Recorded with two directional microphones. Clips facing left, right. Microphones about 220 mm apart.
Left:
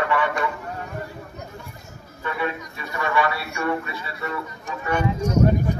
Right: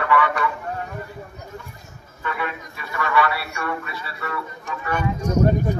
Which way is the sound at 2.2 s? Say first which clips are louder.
Left 2 dB; 20° left (ahead or behind).